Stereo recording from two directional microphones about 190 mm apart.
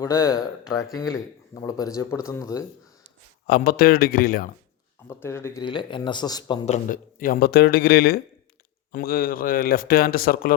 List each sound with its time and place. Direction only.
0.0 s speech: 15° left (ahead or behind)
3.4 s speech: 50° left (ahead or behind)
5.0 s speech: 15° left (ahead or behind)
5.6 s speech: 25° left (ahead or behind)
6.7 s speech: 45° left (ahead or behind)